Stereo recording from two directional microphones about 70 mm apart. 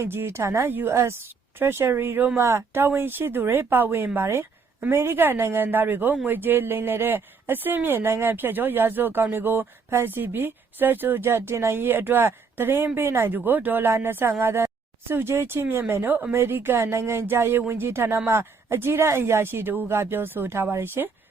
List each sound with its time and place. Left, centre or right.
0.0 s speech: right
0.7 s speech: right
2.4 s speech: right